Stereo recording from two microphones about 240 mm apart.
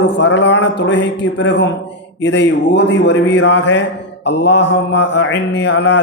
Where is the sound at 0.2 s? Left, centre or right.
Left.